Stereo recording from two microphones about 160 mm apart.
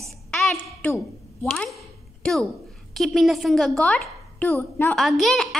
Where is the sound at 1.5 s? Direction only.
5° left (ahead or behind).